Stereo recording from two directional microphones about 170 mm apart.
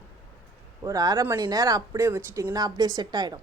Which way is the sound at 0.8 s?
20° right (ahead or behind).